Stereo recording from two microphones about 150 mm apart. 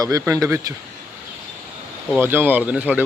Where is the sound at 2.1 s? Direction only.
15° right (ahead or behind).